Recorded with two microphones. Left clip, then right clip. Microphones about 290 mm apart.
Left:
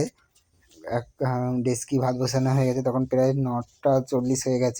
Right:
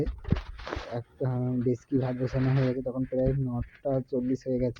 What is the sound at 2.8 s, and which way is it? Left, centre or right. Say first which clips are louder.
Speech: left 7 dB; right.